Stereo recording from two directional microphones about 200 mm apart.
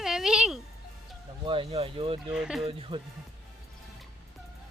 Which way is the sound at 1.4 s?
25° right (ahead or behind).